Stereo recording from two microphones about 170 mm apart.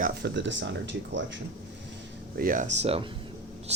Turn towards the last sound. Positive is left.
turn(degrees=-40)  # may be behind; listen again after turning